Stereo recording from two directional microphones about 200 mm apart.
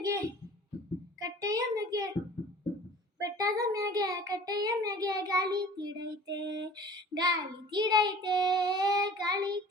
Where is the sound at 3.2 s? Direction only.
15° right (ahead or behind).